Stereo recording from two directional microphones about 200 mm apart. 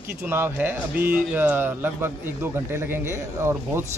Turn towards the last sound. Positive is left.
turn(degrees=-15)  # may be behind; listen again after turning